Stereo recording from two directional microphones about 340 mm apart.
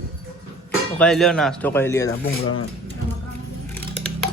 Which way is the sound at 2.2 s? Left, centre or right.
Left.